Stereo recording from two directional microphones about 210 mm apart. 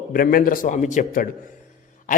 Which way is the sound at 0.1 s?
45° left (ahead or behind).